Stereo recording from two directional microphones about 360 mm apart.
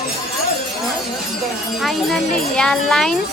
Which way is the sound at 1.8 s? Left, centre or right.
Centre.